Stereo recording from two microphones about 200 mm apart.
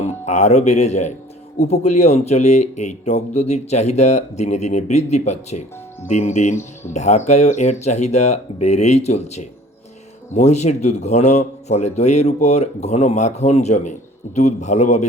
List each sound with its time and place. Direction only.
0.0 s speech: 35° left (ahead or behind)